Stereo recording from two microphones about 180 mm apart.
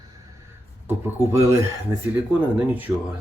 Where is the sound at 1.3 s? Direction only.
15° right (ahead or behind).